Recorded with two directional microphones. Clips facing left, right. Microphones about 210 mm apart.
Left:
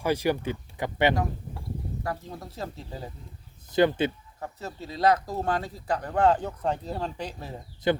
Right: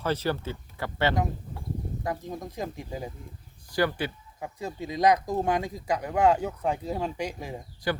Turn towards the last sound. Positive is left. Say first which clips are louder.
# left 5 dB
turn(degrees=20)  # may be behind; listen again after turning